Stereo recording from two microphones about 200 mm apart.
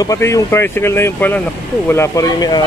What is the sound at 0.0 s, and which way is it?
Speech, 15° left (ahead or behind).